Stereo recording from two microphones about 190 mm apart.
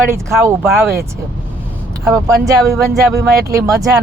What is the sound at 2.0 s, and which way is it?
Speech, 15° right (ahead or behind).